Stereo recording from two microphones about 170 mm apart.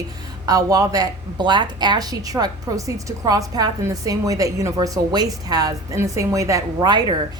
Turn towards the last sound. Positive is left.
turn(degrees=-25)  # may be behind; listen again after turning